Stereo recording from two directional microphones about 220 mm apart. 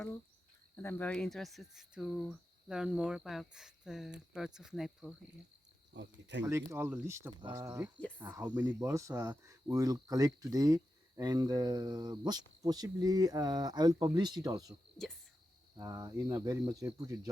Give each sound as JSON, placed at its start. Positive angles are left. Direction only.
{"t": 0.8, "sound": "speech", "side_deg": 10}
{"t": 5.9, "sound": "cricket", "side_deg": -55}
{"t": 6.4, "sound": "speech", "side_deg": -15}
{"t": 14.7, "sound": "speech", "side_deg": 0}
{"t": 15.8, "sound": "speech", "side_deg": -15}